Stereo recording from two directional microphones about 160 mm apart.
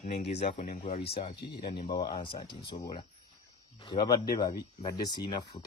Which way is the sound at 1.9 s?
25° left (ahead or behind).